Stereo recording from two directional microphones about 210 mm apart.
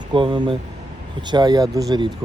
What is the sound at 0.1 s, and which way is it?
Speech, 25° right (ahead or behind).